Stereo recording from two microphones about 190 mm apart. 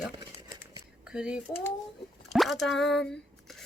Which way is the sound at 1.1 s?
5° right (ahead or behind).